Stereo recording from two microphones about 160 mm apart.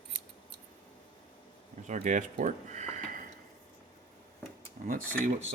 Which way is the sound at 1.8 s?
50° right (ahead or behind).